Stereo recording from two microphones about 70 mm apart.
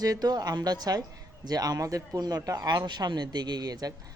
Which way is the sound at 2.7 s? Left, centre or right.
Right.